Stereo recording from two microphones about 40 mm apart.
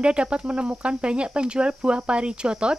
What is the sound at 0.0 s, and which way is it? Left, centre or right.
Speech, right.